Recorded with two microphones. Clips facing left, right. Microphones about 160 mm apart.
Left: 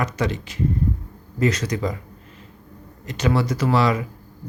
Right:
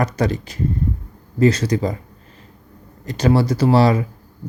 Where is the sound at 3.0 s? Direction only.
35° right (ahead or behind).